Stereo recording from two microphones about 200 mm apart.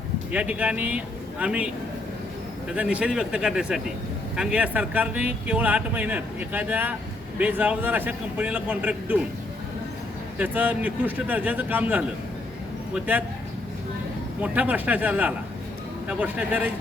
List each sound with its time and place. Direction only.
0.3 s speech: 5° right (ahead or behind)
10.3 s speech: 10° right (ahead or behind)
14.4 s speech: 5° right (ahead or behind)